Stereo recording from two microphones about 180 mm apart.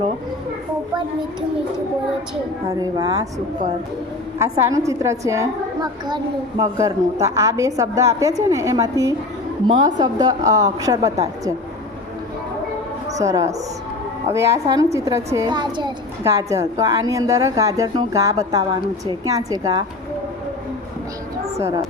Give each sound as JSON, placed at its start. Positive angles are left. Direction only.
{"t": 2.6, "sound": "a woman's voice", "side_deg": -20}
{"t": 4.4, "sound": "a woman's voice", "side_deg": -15}
{"t": 13.1, "sound": "a woman's voice", "side_deg": -20}
{"t": 21.6, "sound": "a woman's voice", "side_deg": -15}